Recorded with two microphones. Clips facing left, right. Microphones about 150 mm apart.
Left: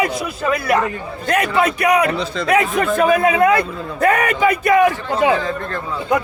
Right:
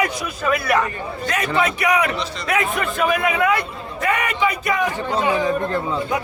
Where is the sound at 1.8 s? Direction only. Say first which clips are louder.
Left 4 dB; 40° left (ahead or behind); by 4.8 s 55° left (ahead or behind).